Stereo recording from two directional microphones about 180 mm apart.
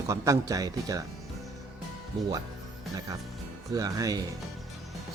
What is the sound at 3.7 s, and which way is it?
Speech, 20° right (ahead or behind).